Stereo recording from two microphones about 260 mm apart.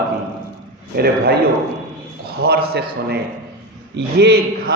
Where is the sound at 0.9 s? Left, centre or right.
Right.